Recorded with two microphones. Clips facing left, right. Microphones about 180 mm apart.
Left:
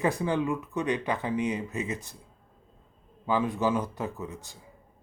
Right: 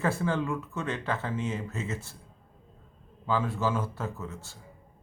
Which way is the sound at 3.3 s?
15° left (ahead or behind).